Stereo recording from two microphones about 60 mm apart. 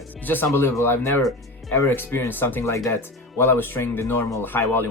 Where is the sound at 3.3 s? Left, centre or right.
Left.